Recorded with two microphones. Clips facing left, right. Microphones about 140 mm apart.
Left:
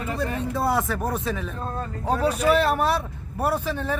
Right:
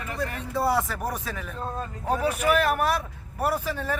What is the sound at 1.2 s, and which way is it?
Speech, centre (ahead or behind).